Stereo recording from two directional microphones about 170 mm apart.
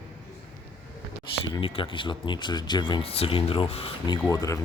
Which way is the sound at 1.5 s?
30° left (ahead or behind).